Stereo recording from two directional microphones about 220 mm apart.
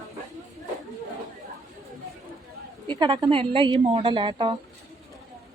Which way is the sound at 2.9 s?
20° right (ahead or behind).